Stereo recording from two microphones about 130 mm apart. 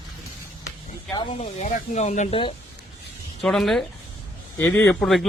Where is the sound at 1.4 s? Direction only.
60° left (ahead or behind).